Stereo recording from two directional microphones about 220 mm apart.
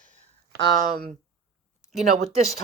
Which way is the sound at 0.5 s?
20° left (ahead or behind).